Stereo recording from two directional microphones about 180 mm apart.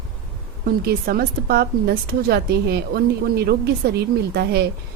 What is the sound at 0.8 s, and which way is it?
A woman's voice, 60° right (ahead or behind).